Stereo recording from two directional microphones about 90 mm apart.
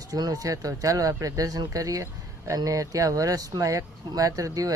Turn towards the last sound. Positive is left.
turn(degrees=-40)  # may be behind; listen again after turning